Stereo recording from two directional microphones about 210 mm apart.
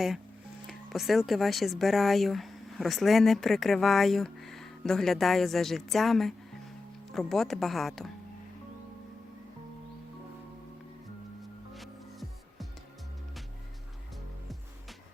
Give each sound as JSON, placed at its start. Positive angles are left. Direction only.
{"t": 0.7, "sound": "speech", "side_deg": 0}
{"t": 11.7, "sound": "music", "side_deg": 0}